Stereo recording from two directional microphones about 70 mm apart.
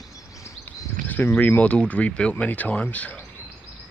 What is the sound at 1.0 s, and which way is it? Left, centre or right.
Speech, left.